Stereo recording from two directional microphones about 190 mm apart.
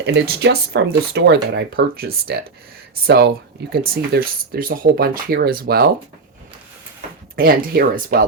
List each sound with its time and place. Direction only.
0.0 s speech: 60° right (ahead or behind)
7.3 s speech: 50° right (ahead or behind)